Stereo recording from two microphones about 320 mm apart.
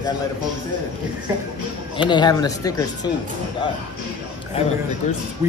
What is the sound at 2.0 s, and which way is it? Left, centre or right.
Speech, centre.